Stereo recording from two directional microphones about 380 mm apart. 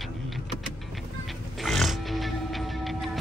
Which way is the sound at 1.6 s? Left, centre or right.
Centre.